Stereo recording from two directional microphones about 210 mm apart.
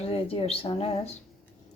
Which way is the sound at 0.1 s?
30° left (ahead or behind).